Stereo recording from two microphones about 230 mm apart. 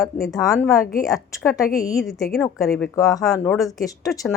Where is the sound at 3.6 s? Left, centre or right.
Centre.